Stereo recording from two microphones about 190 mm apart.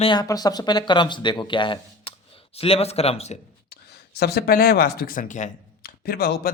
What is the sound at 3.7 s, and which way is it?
Speech, 55° left (ahead or behind).